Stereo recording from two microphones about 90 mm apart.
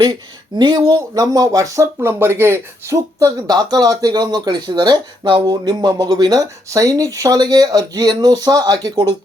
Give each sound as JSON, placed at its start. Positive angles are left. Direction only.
{"t": 0.0, "sound": "speech", "side_deg": -55}
{"t": 3.4, "sound": "speech", "side_deg": -50}